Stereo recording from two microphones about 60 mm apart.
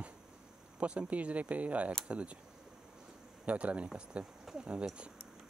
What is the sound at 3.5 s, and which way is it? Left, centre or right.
Speech, right.